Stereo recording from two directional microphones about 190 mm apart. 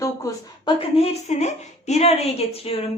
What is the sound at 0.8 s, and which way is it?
A woman's voice, 30° left (ahead or behind).